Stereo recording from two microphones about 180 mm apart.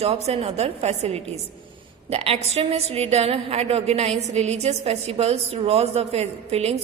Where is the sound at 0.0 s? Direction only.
35° right (ahead or behind).